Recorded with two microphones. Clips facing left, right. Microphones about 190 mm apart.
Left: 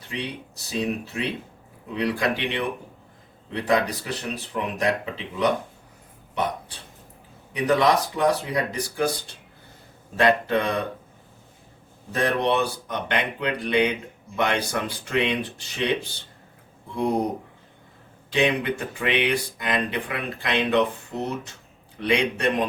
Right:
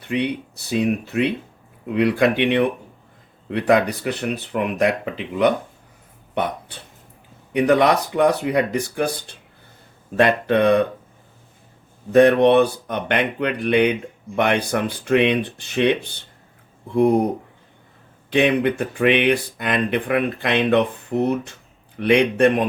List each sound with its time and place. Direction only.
0.7 s speech: 60° right (ahead or behind)
7.5 s speech: 65° right (ahead or behind)
10.2 s speech: 55° right (ahead or behind)
12.1 s speech: 65° right (ahead or behind)
18.3 s speech: 55° right (ahead or behind)